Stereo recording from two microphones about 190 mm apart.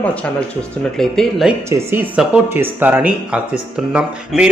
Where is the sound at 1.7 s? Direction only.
10° right (ahead or behind).